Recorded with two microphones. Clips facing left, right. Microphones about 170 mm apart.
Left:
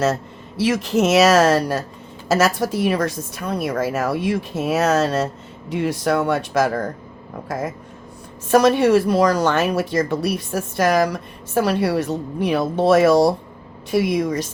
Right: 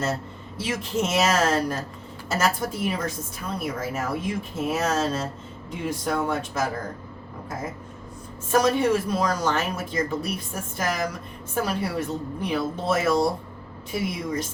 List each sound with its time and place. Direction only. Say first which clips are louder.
0.0 s a woman's voice: left 7 dB; 85° left